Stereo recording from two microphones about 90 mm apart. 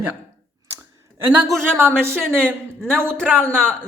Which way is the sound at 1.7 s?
25° right (ahead or behind).